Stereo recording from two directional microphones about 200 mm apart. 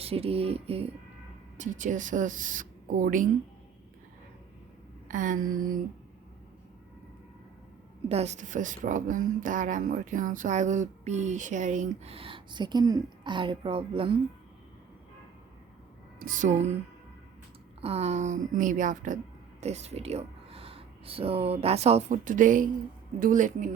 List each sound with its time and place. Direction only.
0.0 s a sound: 30° right (ahead or behind)
1.5 s speech: 40° right (ahead or behind)
5.0 s a sound: 40° right (ahead or behind)
8.0 s speech: 30° right (ahead or behind)
16.2 s speech: 40° right (ahead or behind)
17.7 s speech: 30° right (ahead or behind)